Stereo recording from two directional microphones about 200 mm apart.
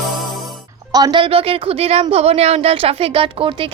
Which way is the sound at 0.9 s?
20° right (ahead or behind).